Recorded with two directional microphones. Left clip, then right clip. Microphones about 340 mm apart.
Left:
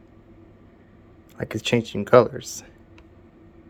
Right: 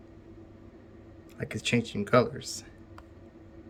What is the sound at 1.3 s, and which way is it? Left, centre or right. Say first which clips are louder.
Speech: left 6 dB; centre.